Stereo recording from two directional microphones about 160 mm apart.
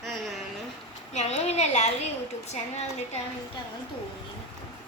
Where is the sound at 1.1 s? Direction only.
45° left (ahead or behind).